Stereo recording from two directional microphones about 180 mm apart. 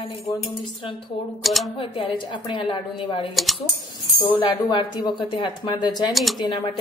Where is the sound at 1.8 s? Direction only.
30° left (ahead or behind).